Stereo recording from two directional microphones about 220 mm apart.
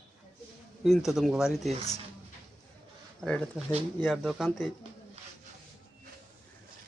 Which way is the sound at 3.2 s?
5° left (ahead or behind).